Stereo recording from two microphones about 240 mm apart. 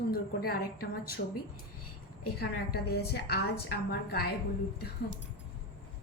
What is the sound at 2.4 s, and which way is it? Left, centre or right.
A woman's voice, left.